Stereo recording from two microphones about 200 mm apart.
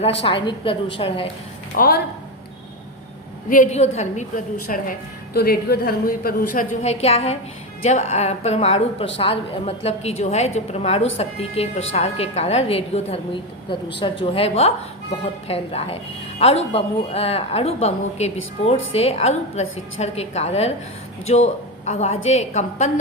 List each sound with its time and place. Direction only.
0.2 s a woman's voice: 25° left (ahead or behind)
1.7 s speech: 45° left (ahead or behind)
3.5 s a woman's voice: 35° left (ahead or behind)
4.6 s a woman's voice: 45° left (ahead or behind)